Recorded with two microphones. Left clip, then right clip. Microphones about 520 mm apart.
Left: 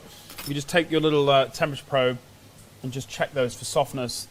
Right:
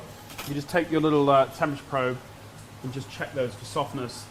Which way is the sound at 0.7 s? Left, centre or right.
Left.